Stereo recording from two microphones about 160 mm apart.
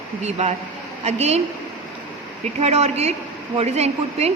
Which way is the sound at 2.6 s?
40° right (ahead or behind).